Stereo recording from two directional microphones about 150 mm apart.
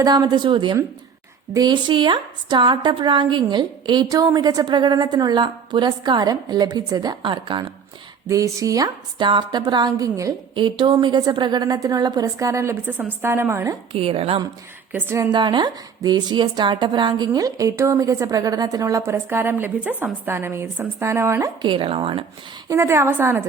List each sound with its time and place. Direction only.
0.0 s a woman's voice: 25° right (ahead or behind)
8.3 s a woman's voice: 20° right (ahead or behind)
13.9 s a woman's voice: 40° right (ahead or behind)
14.9 s a woman's voice: 15° right (ahead or behind)
15.3 s a woman's voice: 30° right (ahead or behind)
21.7 s a woman's voice: 35° right (ahead or behind)
22.7 s a woman's voice: 20° right (ahead or behind)